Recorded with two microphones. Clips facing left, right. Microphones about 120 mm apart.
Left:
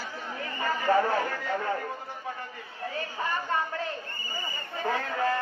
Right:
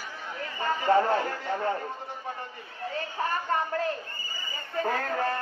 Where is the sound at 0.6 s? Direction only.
25° right (ahead or behind).